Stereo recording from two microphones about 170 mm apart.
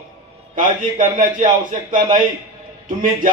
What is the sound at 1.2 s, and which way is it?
A man's voice, 50° right (ahead or behind).